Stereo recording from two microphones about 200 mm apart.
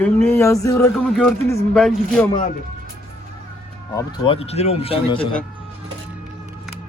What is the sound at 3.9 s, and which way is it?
Speech, 20° left (ahead or behind).